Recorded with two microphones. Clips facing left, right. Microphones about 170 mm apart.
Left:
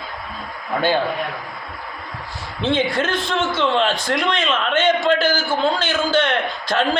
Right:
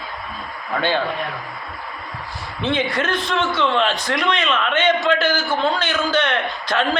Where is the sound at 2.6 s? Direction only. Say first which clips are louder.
Left 2 dB; 25° left (ahead or behind).